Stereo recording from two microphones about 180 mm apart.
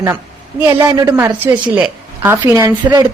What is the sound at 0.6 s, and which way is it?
Speech, 20° right (ahead or behind).